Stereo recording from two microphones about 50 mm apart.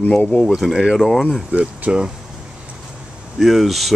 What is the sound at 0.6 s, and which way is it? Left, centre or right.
Speech, centre.